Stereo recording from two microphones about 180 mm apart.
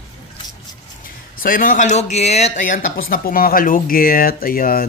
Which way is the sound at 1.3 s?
50° left (ahead or behind).